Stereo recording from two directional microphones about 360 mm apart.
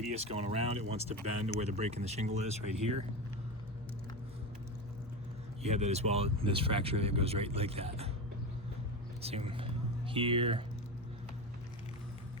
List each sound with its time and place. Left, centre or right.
0.2 s speech: centre
5.6 s speech: centre
9.2 s speech: centre